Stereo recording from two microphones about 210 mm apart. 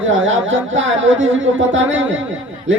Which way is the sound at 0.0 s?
65° right (ahead or behind).